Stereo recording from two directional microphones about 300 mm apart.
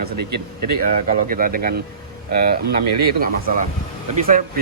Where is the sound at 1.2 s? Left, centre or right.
Right.